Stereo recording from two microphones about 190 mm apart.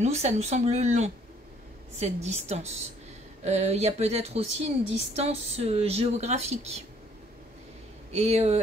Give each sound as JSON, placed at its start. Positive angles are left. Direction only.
{"t": 0.0, "sound": "speech", "side_deg": -35}
{"t": 8.1, "sound": "speech", "side_deg": -35}